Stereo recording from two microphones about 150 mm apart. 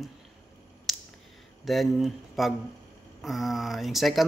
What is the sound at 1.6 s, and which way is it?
Speech, centre (ahead or behind).